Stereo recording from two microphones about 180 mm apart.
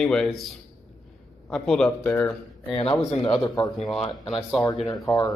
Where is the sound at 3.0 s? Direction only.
20° left (ahead or behind).